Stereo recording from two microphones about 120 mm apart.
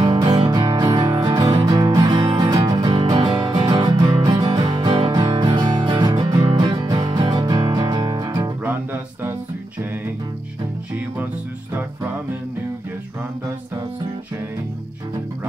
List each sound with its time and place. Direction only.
0.0 s music: 35° right (ahead or behind)